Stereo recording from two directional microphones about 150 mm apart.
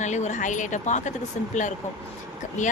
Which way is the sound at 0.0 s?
55° left (ahead or behind).